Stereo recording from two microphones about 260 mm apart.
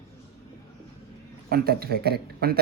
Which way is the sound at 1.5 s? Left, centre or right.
Right.